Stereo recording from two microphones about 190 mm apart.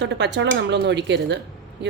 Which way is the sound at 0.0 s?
65° right (ahead or behind).